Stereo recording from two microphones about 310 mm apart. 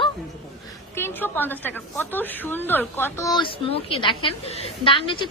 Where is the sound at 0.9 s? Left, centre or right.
Centre.